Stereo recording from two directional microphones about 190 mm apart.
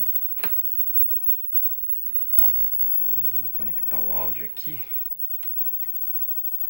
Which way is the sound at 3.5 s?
15° right (ahead or behind).